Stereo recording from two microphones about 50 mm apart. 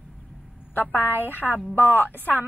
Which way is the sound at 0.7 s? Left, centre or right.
Left.